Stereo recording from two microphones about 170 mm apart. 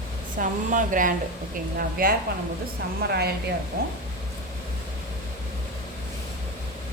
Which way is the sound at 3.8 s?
65° right (ahead or behind).